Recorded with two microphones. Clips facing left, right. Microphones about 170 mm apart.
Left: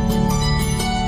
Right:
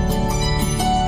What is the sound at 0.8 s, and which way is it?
Music, 40° right (ahead or behind).